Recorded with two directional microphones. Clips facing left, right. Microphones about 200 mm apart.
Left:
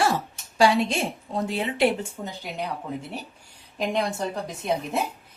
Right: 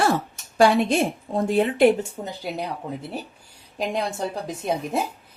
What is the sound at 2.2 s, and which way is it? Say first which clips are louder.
Speech: right 2 dB; 30° right (ahead or behind).